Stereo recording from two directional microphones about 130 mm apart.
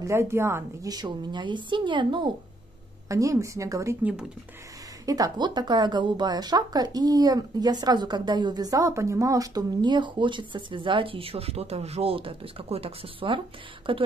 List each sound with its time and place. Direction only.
0.0 s speech: 20° right (ahead or behind)
0.9 s a woman's voice: 35° right (ahead or behind)
3.1 s speech: 25° right (ahead or behind)
4.0 s speech: 10° right (ahead or behind)
5.0 s a woman's voice: 30° right (ahead or behind)